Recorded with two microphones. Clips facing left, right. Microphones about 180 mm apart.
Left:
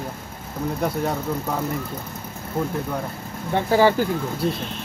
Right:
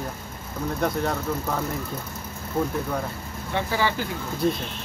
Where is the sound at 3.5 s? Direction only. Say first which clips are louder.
Left 8 dB; 45° left (ahead or behind).